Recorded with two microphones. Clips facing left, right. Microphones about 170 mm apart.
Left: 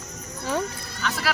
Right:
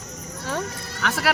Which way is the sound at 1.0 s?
70° right (ahead or behind).